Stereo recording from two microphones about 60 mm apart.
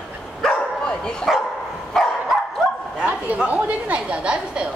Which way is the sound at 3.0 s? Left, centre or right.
Right.